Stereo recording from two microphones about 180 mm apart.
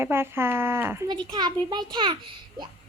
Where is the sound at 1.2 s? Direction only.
25° right (ahead or behind).